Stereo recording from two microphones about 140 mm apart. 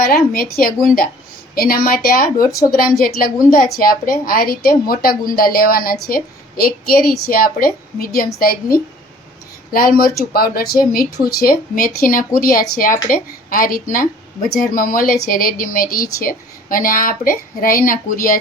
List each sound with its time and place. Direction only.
0.0 s a woman's voice: 90° left